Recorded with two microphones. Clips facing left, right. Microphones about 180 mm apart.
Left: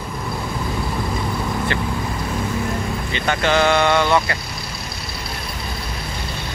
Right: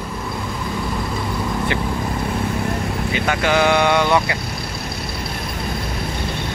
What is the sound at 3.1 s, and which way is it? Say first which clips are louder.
Speech: even; 10° right (ahead or behind).